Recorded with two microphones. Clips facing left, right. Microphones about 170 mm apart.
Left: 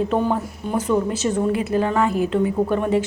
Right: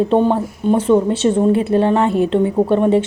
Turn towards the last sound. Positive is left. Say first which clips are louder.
# right 6 dB
turn(degrees=-25)  # may be behind; listen again after turning